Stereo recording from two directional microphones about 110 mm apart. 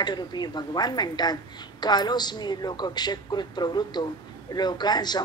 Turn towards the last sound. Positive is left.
turn(degrees=40)  # may be behind; listen again after turning